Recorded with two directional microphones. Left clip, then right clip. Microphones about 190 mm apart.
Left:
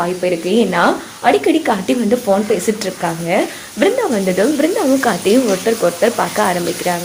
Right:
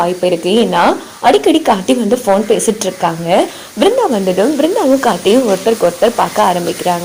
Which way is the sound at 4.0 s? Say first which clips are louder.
Right 3 dB; 10° right (ahead or behind).